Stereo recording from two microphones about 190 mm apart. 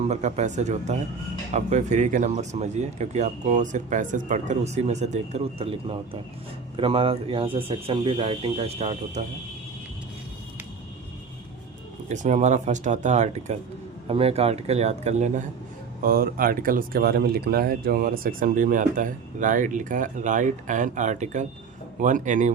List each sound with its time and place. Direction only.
0.1 s speech: 35° right (ahead or behind)
12.0 s speech: 40° right (ahead or behind)
16.0 s speech: 50° right (ahead or behind)